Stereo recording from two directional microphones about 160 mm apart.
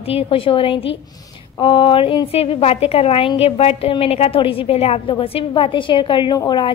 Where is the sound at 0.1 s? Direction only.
35° left (ahead or behind).